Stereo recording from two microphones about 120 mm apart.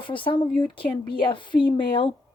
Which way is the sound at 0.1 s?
45° left (ahead or behind).